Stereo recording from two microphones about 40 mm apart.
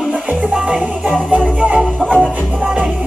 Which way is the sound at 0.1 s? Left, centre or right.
Right.